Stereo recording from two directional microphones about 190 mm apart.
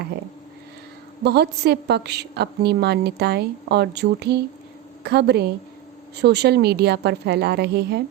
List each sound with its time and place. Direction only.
1.2 s a woman's voice: 60° right (ahead or behind)